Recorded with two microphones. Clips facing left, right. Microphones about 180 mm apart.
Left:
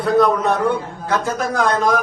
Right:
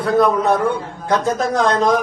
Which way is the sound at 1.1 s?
25° right (ahead or behind).